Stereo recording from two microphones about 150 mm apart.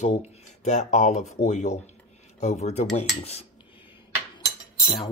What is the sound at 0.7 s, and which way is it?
Speech, 55° left (ahead or behind).